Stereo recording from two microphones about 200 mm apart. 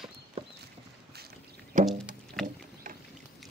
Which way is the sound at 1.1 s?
50° right (ahead or behind).